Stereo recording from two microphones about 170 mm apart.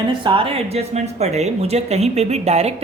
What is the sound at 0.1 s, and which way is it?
Speech, 30° right (ahead or behind).